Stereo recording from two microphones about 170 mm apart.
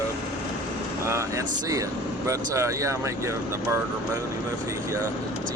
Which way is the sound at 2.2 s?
20° right (ahead or behind).